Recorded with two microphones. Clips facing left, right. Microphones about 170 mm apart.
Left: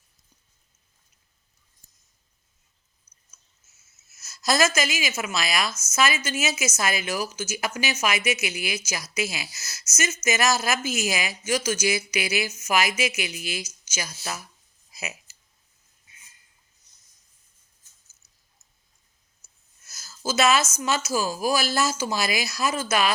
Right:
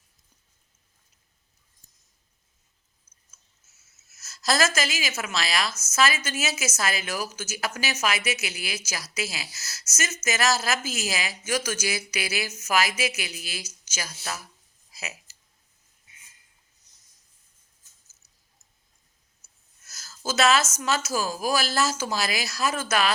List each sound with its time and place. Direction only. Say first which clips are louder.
4.2 s speech: left 2 dB; 15° left (ahead or behind)
11.5 s speech: left 3 dB; 50° right (ahead or behind)
11.9 s speech: left 5 dB; 15° left (ahead or behind)
19.9 s speech: left 2 dB; 10° left (ahead or behind)